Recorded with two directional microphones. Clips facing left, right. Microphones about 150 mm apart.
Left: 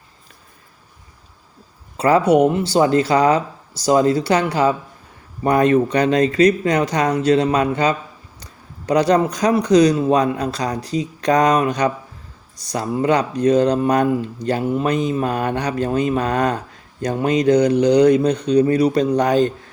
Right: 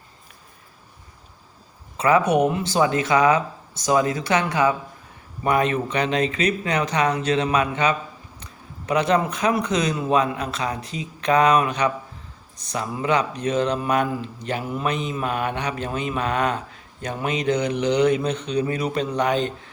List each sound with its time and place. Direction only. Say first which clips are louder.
2.0 s speech: left 4 dB; 35° left (ahead or behind)